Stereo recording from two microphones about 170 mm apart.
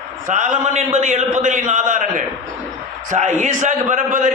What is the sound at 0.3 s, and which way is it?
A man's voice, 45° right (ahead or behind).